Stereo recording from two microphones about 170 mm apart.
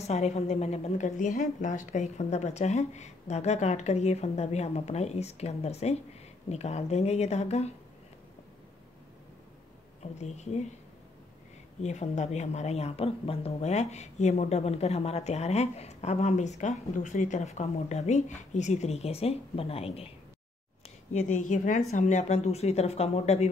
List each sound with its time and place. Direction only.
0.0 s speech: 40° left (ahead or behind)
10.1 s speech: 40° left (ahead or behind)
11.8 s speech: 40° left (ahead or behind)
21.1 s speech: 45° left (ahead or behind)